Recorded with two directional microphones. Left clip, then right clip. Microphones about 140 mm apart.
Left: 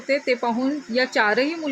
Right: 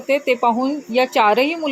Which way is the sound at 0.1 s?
15° right (ahead or behind).